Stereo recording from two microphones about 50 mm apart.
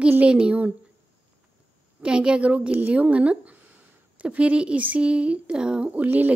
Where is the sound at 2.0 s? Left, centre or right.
Centre.